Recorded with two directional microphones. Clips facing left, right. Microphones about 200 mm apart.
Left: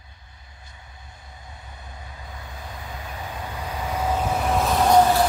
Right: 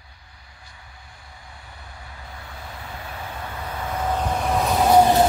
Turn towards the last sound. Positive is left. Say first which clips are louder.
# right 1 dB
turn(degrees=-5)  # may be behind; listen again after turning